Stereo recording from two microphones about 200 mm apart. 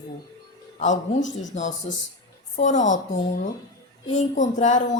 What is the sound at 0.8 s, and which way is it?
Speech, 35° left (ahead or behind).